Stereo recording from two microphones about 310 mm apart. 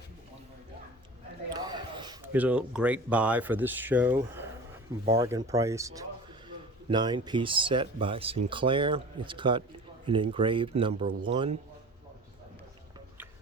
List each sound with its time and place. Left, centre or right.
1.5 s a man's voice: centre